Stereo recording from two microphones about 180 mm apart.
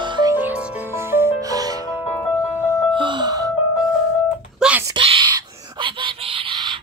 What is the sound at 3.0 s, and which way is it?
Music, 25° right (ahead or behind).